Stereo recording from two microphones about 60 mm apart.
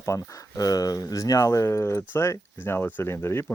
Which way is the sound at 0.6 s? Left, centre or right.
Left.